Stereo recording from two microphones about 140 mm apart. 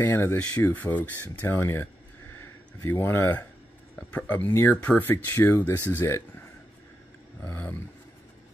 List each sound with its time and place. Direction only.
0.0 s speech: 15° left (ahead or behind)
7.4 s speech: 15° left (ahead or behind)